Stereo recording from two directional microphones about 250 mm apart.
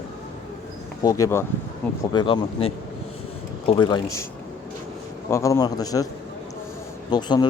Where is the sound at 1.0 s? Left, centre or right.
Centre.